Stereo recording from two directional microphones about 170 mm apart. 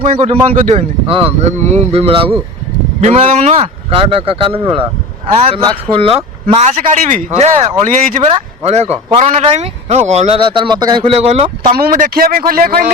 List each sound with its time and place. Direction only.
0.0 s a man's voice: 40° right (ahead or behind)
8.3 s a man's voice: 40° right (ahead or behind)
11.7 s a man's voice: 60° right (ahead or behind)